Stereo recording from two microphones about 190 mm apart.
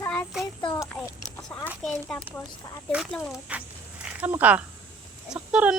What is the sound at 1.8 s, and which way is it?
Speech, 5° left (ahead or behind).